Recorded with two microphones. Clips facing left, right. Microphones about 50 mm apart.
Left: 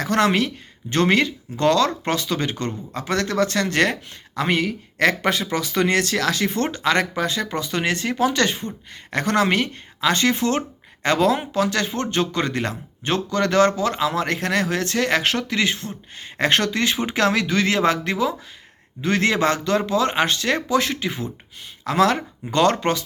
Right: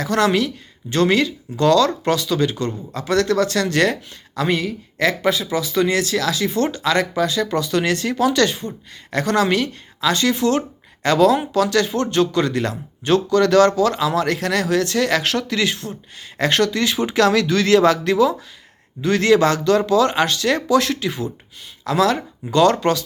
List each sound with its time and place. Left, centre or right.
0.0 s speech: left
21.8 s speech: left